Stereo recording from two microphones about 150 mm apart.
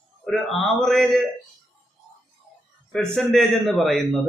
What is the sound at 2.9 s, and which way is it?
A man's voice, 5° left (ahead or behind).